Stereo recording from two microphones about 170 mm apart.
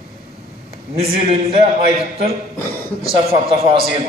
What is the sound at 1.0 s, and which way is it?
Speech, 35° right (ahead or behind).